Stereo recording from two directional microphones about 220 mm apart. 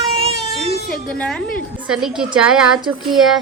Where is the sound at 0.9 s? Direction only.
5° left (ahead or behind).